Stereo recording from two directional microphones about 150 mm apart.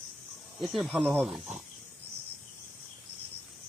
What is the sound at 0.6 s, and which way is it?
Speech, centre (ahead or behind).